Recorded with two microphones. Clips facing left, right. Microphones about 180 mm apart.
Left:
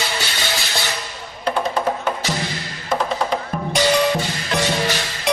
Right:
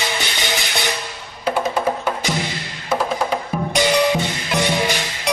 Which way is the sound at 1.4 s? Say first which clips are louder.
Right 1 dB; 5° right (ahead or behind).